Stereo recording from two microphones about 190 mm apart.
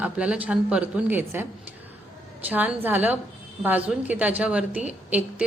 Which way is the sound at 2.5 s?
10° right (ahead or behind).